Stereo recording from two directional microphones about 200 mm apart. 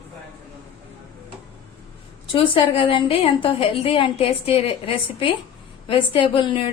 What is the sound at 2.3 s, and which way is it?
A woman's voice, 25° left (ahead or behind).